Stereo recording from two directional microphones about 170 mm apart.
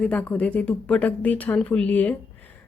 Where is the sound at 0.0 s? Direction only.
10° left (ahead or behind).